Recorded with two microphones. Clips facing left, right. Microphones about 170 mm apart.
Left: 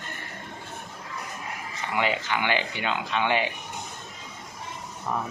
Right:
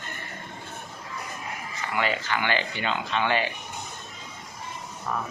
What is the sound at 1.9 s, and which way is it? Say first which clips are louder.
Speech: left 1 dB; 15° left (ahead or behind).